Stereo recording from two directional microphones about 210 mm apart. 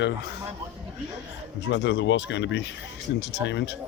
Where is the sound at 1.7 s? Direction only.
60° left (ahead or behind).